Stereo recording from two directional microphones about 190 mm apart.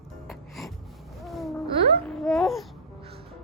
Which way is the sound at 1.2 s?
Centre (ahead or behind).